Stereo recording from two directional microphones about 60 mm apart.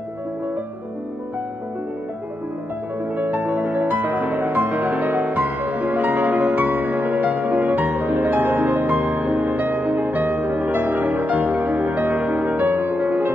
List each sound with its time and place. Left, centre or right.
3.2 s music: right